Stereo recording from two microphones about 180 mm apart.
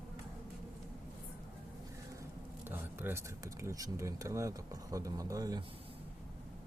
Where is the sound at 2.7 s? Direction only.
10° right (ahead or behind).